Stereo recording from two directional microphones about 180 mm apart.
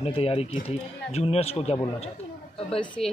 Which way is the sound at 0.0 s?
35° left (ahead or behind).